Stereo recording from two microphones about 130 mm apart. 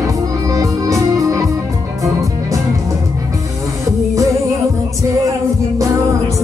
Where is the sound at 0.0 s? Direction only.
25° right (ahead or behind).